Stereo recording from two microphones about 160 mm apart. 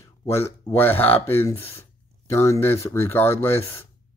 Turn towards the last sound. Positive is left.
turn(degrees=15)  # may be behind; listen again after turning